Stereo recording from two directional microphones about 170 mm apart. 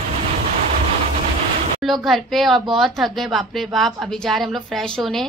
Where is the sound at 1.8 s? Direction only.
Centre (ahead or behind).